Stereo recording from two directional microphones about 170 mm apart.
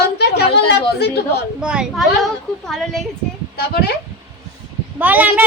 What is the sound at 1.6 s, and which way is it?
A woman's voice, 5° right (ahead or behind).